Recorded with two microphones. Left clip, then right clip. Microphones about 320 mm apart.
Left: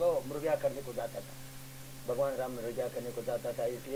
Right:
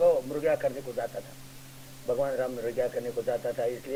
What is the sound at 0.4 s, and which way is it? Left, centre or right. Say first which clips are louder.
Radio: right 5 dB; right.